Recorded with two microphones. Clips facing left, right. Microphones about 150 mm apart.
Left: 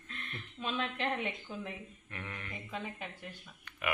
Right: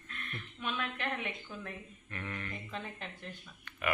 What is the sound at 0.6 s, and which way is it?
A woman's voice, 30° left (ahead or behind).